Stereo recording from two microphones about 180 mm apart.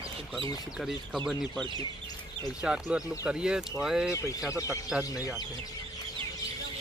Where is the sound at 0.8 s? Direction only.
Centre (ahead or behind).